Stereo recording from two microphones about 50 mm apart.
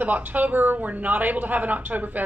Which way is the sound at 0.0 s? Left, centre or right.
Right.